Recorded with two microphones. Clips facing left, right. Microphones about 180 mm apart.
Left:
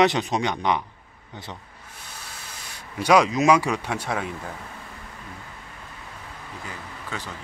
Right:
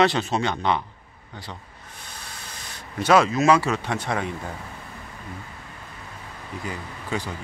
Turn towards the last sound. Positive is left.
turn(degrees=-15)  # may be behind; listen again after turning